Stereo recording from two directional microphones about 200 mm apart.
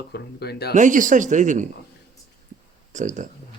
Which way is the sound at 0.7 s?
40° right (ahead or behind).